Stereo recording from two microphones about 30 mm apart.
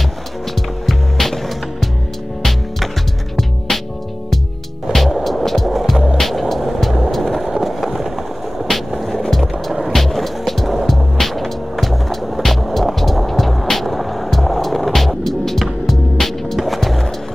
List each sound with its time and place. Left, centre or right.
0.8 s music: centre
3.3 s music: centre
4.9 s skateboard: centre
6.6 s music: centre
7.6 s a sound: centre
8.6 s music: centre
9.1 s music: centre
9.9 s music: centre
10.9 s skateboard: centre
15.9 s music: centre